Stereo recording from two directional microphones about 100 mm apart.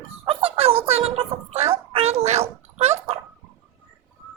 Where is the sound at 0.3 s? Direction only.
65° right (ahead or behind); by 2.9 s 90° right.